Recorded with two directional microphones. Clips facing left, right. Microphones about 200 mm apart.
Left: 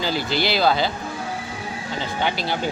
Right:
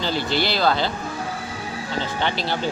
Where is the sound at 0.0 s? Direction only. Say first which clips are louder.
Even; 5° left (ahead or behind).